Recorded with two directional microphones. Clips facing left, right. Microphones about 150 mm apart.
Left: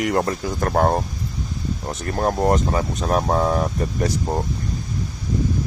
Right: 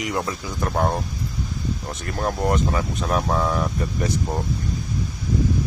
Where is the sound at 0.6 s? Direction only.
40° left (ahead or behind).